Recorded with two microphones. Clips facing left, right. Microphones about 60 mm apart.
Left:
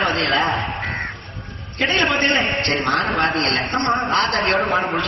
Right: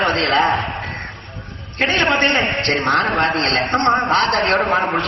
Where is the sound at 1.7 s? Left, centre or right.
Right.